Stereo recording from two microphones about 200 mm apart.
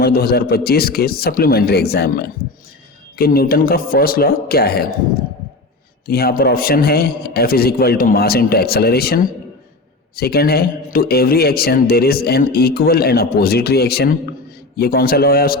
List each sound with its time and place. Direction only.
0.0 s a man's voice: 50° left (ahead or behind)
6.1 s a man's voice: 50° left (ahead or behind)